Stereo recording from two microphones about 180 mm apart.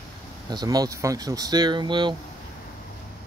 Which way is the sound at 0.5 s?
20° right (ahead or behind).